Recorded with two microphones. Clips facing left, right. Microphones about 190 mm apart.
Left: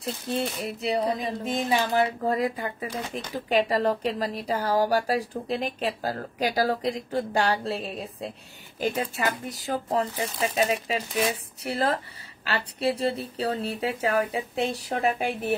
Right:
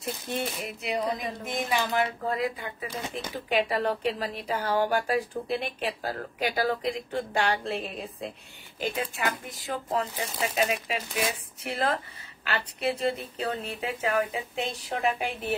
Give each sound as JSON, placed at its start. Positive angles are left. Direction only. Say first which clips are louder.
{"t": 0.0, "sound": "a woman's voice", "louder": "left 3 dB", "side_deg": 30}